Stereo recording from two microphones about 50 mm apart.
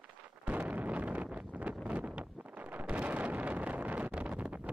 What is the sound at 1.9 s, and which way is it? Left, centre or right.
Wind noise, right.